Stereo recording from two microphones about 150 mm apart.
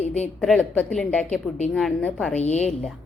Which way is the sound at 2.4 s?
45° left (ahead or behind).